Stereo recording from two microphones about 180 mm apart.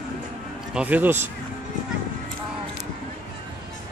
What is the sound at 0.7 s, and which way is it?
Speech, 10° right (ahead or behind).